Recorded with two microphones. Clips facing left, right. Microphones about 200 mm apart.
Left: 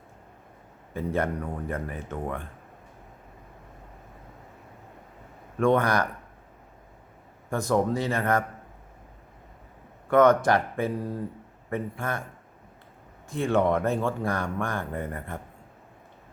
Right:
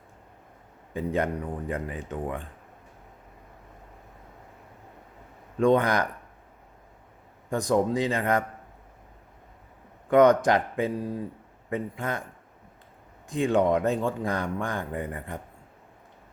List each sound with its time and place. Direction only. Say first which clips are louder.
0.9 s speech: even; 15° right (ahead or behind)
5.5 s speech: right 1 dB; 20° right (ahead or behind)
7.5 s speech: right 1 dB; 15° right (ahead or behind)
10.1 s speech: right 1 dB; 20° right (ahead or behind)
13.3 s speech: right 1 dB; 15° right (ahead or behind)